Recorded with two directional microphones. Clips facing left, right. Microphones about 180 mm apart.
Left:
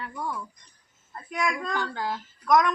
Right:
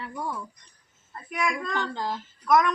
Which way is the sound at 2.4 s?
5° right (ahead or behind).